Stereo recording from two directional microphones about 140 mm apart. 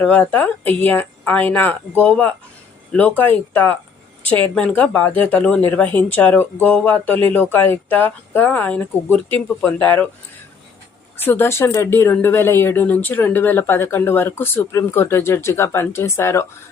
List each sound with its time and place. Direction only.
0.0 s speech: 10° left (ahead or behind)
11.2 s speech: 15° left (ahead or behind)